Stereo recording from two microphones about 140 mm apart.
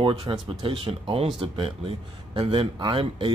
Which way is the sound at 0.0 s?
35° right (ahead or behind).